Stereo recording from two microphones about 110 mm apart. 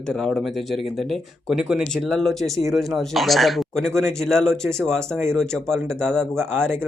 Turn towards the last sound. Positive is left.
turn(degrees=-20)  # may be behind; listen again after turning